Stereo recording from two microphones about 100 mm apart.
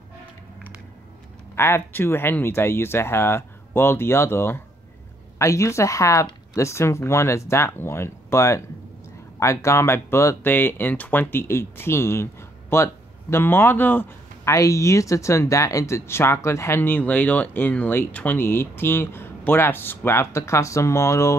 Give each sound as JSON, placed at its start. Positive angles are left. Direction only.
{"t": 1.5, "sound": "speech", "side_deg": 25}